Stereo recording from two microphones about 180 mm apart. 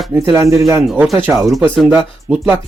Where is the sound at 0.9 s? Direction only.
Centre (ahead or behind).